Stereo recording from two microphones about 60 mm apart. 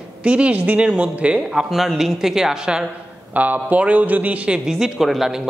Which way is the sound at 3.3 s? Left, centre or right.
Right.